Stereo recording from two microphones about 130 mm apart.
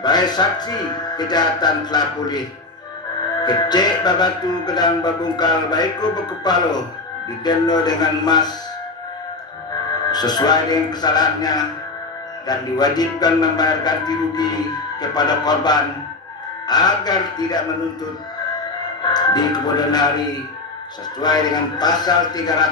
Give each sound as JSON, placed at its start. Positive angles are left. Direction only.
{"t": 0.0, "sound": "music", "side_deg": 30}
{"t": 10.0, "sound": "music", "side_deg": 30}
{"t": 19.0, "sound": "music", "side_deg": 35}